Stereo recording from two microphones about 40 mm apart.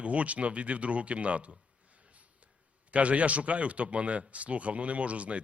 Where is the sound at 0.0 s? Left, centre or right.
Right.